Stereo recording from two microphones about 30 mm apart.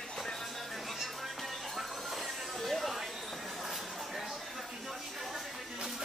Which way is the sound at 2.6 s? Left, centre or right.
Centre.